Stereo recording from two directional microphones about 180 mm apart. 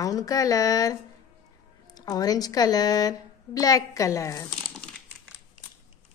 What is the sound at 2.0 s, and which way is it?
A woman's voice, 20° left (ahead or behind).